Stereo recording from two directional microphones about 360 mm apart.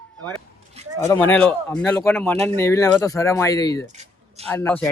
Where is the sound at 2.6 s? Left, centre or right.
Centre.